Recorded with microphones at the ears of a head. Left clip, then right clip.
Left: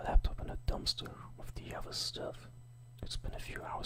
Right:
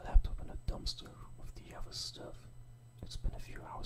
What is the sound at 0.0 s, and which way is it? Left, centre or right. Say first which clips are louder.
Whispering: left 8 dB; left.